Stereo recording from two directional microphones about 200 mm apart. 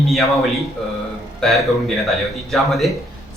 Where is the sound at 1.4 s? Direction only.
Centre (ahead or behind).